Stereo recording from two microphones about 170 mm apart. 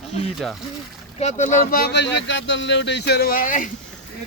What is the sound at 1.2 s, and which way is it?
Speech, 45° left (ahead or behind).